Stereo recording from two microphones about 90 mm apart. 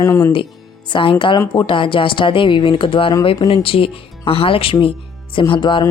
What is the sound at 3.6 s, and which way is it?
Speech, 90° left.